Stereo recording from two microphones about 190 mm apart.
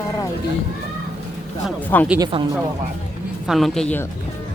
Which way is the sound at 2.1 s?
25° right (ahead or behind).